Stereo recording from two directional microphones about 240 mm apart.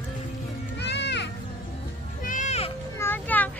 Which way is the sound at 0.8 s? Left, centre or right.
Left.